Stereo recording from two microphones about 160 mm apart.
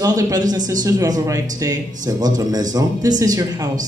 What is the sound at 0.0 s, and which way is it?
A man's voice, 25° right (ahead or behind).